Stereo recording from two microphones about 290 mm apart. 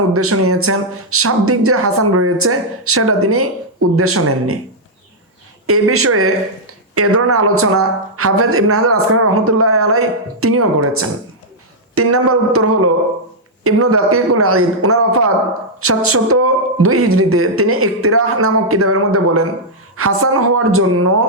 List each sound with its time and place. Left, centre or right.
0.1 s speech: right
5.6 s speech: right